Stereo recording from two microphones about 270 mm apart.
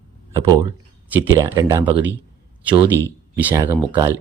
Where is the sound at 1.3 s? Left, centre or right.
Centre.